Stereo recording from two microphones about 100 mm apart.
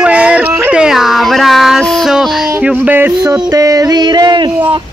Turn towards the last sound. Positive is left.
turn(degrees=-50)  # may be behind; listen again after turning